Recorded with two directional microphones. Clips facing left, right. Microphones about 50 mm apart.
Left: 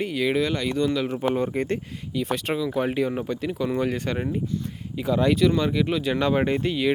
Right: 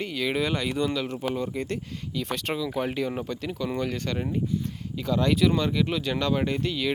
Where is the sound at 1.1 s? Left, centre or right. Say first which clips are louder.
Left 5 dB; left.